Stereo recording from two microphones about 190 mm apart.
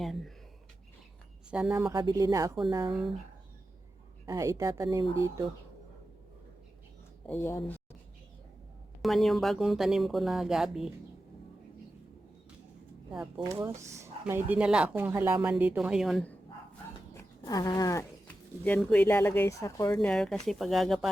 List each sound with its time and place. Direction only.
0.0 s speech: centre (ahead or behind)
1.5 s speech: 5° right (ahead or behind); by 2.9 s 25° right (ahead or behind)
4.3 s speech: 15° right (ahead or behind)
7.3 s speech: 10° left (ahead or behind)
9.0 s speech: centre (ahead or behind)
13.6 s speech: 15° right (ahead or behind); by 16.4 s 5° left (ahead or behind)
17.2 s insect: 20° left (ahead or behind)
18.6 s speech: 5° left (ahead or behind)
20.1 s speech: 5° left (ahead or behind)